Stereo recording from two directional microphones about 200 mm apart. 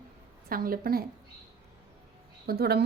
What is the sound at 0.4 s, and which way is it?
Speech, 45° right (ahead or behind).